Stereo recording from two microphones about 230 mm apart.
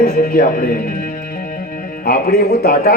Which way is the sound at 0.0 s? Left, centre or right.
Left.